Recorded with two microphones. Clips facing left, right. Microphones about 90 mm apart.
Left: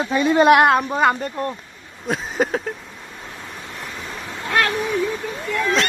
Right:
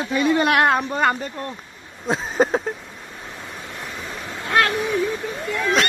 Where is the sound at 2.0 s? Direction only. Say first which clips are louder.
Right 1 dB; 25° right (ahead or behind).